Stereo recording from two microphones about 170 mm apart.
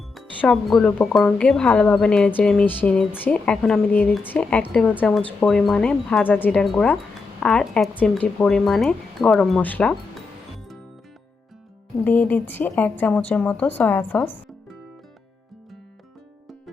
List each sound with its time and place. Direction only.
0.1 s speech: centre (ahead or behind)
12.0 s speech: 10° left (ahead or behind)